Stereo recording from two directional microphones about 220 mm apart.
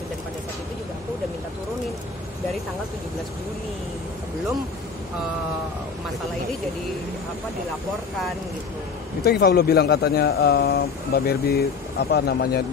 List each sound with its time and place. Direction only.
9.2 s speech: 45° left (ahead or behind)